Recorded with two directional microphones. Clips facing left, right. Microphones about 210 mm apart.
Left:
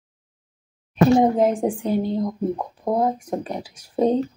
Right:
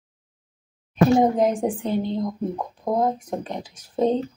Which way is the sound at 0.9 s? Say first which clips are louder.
Left 1 dB; 5° left (ahead or behind).